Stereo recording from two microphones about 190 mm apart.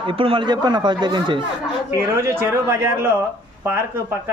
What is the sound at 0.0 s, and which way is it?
Speech, 30° right (ahead or behind).